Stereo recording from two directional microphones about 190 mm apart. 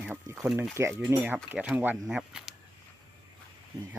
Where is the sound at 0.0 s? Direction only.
10° right (ahead or behind).